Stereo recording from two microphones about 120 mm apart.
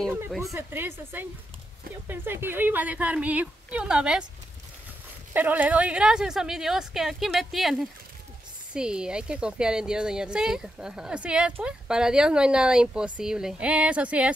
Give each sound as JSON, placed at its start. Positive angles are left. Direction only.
{"t": 0.6, "sound": "speech", "side_deg": -15}
{"t": 5.3, "sound": "speech", "side_deg": -15}